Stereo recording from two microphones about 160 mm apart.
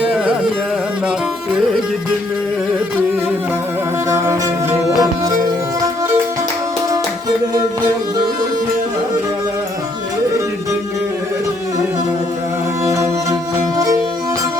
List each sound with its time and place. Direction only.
4.9 s music: 20° right (ahead or behind)
12.8 s music: 20° right (ahead or behind)